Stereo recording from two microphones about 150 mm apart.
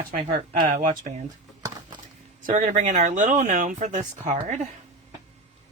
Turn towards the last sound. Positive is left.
turn(degrees=-50)  # may be behind; listen again after turning